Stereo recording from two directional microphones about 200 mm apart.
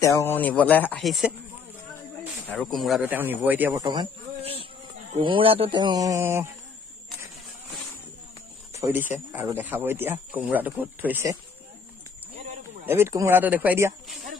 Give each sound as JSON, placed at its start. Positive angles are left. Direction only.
{"t": 0.0, "sound": "speech", "side_deg": 10}
{"t": 2.4, "sound": "speech", "side_deg": 5}
{"t": 8.7, "sound": "speech", "side_deg": -10}
{"t": 12.8, "sound": "speech", "side_deg": -10}